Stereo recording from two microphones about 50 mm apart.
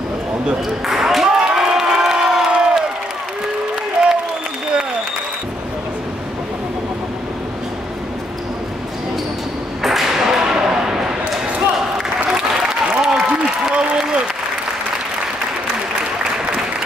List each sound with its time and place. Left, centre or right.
0.8 s a sound: centre
2.5 s crowd: centre
9.8 s arrow: centre
12.3 s applause: centre
16.0 s applause: right